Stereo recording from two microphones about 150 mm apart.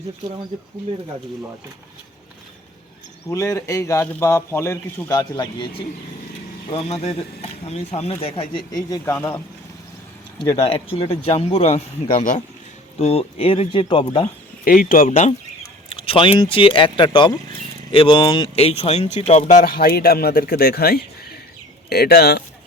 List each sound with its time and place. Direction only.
3.2 s a man's voice: 20° left (ahead or behind)
6.7 s a man's voice: 45° left (ahead or behind)
9.0 s speech: 15° left (ahead or behind)
10.6 s a man's voice: 40° left (ahead or behind)
14.6 s speech: 75° left (ahead or behind)
15.1 s a man's voice: 45° left (ahead or behind)
19.6 s speech: 90° left